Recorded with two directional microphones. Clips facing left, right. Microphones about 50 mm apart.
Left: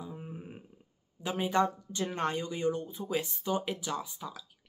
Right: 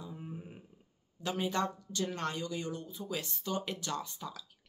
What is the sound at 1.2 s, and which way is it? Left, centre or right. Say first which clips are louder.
Speech: left 4 dB; centre.